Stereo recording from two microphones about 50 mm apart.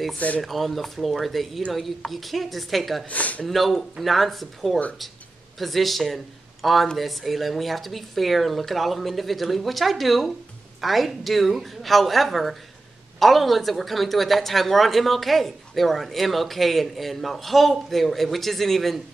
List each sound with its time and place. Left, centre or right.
0.4 s a woman's voice: centre
3.1 s speech: left
3.4 s a woman's voice: centre